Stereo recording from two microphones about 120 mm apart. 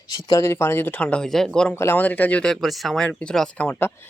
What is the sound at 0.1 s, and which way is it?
Speech, 30° left (ahead or behind).